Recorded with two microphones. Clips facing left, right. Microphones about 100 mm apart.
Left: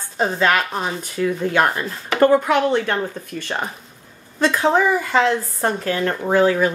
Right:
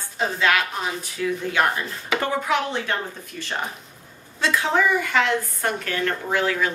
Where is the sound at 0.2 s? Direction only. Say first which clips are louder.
Left 3 dB; 40° left (ahead or behind).